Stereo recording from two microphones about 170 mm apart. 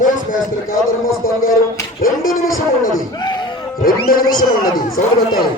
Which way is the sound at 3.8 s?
60° left (ahead or behind).